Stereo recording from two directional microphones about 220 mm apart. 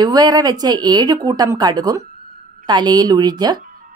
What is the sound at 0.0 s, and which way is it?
Speech, 20° right (ahead or behind).